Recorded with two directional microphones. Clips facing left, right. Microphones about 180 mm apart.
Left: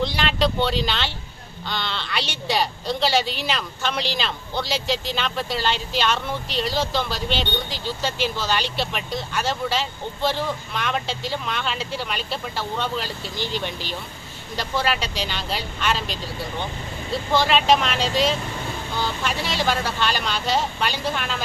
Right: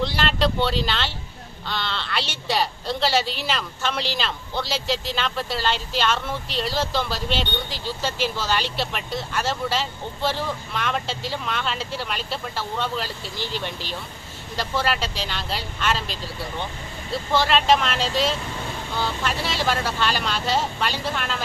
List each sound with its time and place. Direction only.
0.0 s vehicle: centre (ahead or behind)
1.6 s speech: centre (ahead or behind)
17.3 s speech: centre (ahead or behind)